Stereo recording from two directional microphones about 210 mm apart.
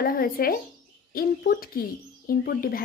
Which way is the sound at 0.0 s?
45° left (ahead or behind).